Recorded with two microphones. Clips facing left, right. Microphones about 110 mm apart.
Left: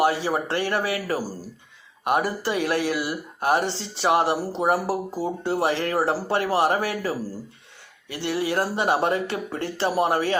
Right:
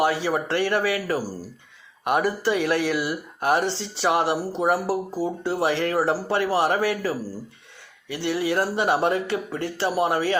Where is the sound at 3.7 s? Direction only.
45° left (ahead or behind).